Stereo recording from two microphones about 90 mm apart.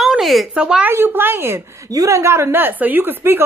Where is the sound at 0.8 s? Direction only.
25° right (ahead or behind).